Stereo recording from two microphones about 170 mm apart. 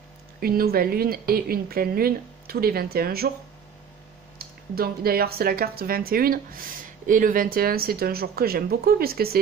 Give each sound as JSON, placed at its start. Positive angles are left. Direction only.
{"t": 0.4, "sound": "speech", "side_deg": -60}
{"t": 4.4, "sound": "speech", "side_deg": -65}